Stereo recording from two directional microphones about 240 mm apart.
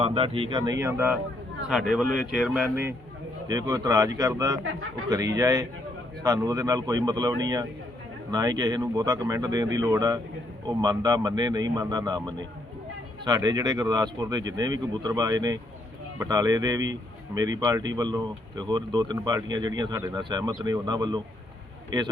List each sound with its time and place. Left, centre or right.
0.0 s speech: right